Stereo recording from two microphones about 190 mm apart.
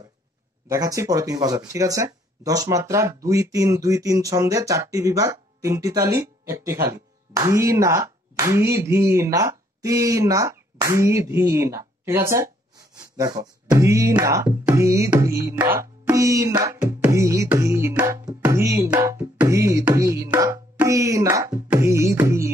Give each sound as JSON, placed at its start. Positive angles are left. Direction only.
{"t": 0.7, "sound": "speech", "side_deg": -20}
{"t": 13.7, "sound": "music", "side_deg": -15}